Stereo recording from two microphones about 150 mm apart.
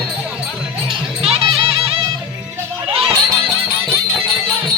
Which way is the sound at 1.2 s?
40° right (ahead or behind).